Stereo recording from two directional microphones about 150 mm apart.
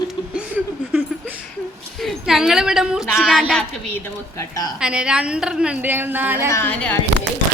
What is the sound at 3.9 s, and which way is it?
Speech, 15° left (ahead or behind).